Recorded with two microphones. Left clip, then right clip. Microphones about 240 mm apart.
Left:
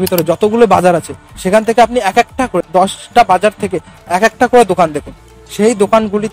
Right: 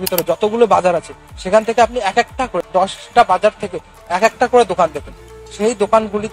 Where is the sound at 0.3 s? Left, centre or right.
Left.